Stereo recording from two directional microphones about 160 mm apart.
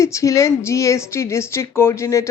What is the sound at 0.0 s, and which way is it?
A man's voice, 20° left (ahead or behind).